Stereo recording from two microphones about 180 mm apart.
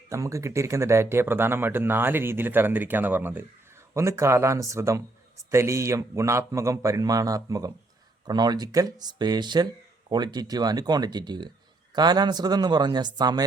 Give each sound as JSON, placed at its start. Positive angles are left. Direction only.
{"t": 0.1, "sound": "speech", "side_deg": -15}